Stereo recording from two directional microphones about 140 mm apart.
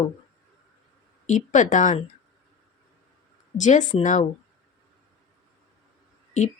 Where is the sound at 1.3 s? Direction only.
60° left (ahead or behind).